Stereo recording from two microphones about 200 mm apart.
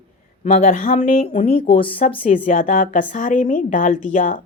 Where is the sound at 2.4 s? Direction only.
40° left (ahead or behind).